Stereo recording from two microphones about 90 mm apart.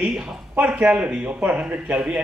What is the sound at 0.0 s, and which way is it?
Speech, 5° right (ahead or behind).